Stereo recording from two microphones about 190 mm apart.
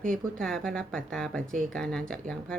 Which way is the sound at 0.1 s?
5° left (ahead or behind).